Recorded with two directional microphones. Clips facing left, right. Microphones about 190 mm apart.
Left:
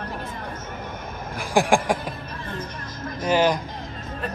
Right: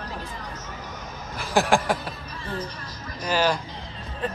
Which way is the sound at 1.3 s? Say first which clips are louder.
Left 2 dB; 15° left (ahead or behind).